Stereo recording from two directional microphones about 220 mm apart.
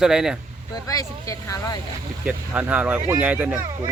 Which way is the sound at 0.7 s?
15° left (ahead or behind).